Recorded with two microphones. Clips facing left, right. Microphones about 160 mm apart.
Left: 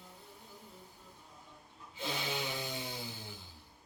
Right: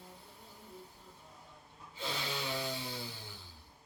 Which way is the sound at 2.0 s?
15° left (ahead or behind).